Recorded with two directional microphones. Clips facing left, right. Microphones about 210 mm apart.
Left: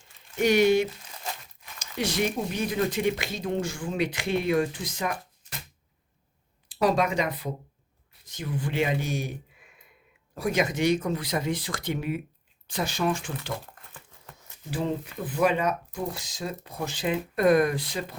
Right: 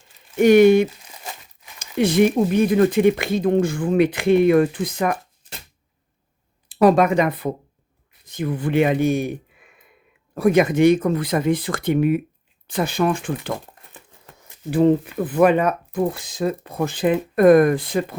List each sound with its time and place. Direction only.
0.3 s speech: 55° right (ahead or behind)
5.1 s a sound: 30° right (ahead or behind)
6.7 s speech: 55° right (ahead or behind)
10.3 s speech: 55° right (ahead or behind)
14.7 s speech: 55° right (ahead or behind)